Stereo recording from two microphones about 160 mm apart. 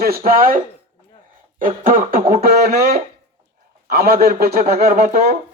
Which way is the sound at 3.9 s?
70° right (ahead or behind).